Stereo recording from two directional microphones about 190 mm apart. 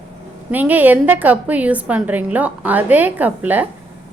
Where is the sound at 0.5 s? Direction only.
10° right (ahead or behind).